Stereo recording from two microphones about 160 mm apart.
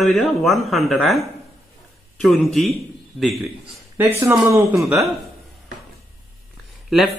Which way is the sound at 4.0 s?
15° right (ahead or behind).